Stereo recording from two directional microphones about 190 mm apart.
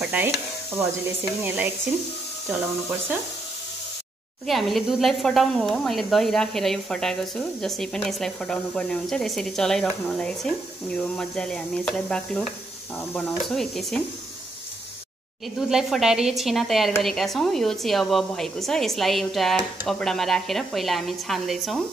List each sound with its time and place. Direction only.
0.0 s sizzle: 10° right (ahead or behind)
1.4 s sizzle: 10° right (ahead or behind)
4.5 s speech: centre (ahead or behind)
15.7 s speech: centre (ahead or behind)